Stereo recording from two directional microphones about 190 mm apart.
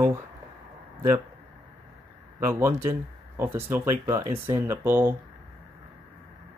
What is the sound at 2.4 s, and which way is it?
Speech, 15° right (ahead or behind).